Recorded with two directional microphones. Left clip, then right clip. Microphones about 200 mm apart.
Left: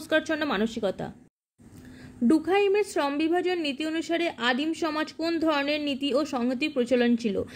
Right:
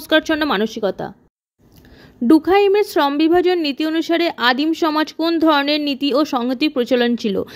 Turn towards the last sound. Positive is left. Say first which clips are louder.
# right 7 dB
turn(degrees=-35)  # may be behind; listen again after turning